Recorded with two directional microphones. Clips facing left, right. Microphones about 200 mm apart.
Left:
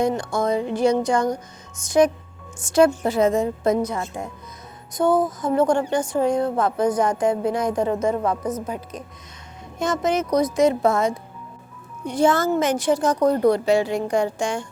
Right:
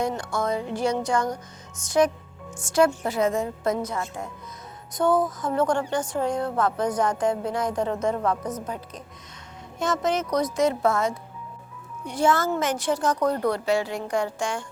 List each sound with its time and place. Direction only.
0.0 s speech: 15° left (ahead or behind)
2.7 s a woman's voice: 25° left (ahead or behind)
4.9 s speech: 10° left (ahead or behind)